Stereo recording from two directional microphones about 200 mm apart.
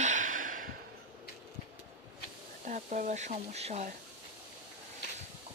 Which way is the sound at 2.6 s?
40° right (ahead or behind).